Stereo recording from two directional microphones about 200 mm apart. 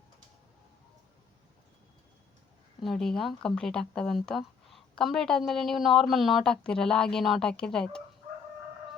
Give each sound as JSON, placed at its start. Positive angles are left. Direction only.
{"t": 2.8, "sound": "speech", "side_deg": 0}